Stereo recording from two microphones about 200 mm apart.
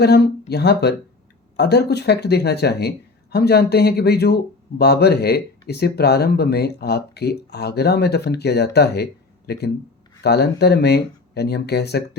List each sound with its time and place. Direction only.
0.0 s speech: 55° left (ahead or behind)